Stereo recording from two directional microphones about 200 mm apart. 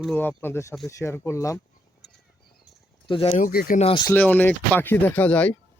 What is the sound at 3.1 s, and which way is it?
Speech, 25° left (ahead or behind).